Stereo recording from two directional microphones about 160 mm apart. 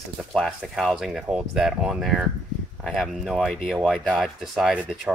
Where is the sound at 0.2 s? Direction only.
Centre (ahead or behind).